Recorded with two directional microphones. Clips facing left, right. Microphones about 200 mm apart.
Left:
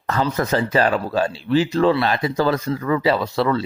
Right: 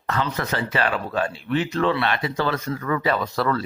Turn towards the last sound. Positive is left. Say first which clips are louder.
# left 4 dB
turn(degrees=25)  # may be behind; listen again after turning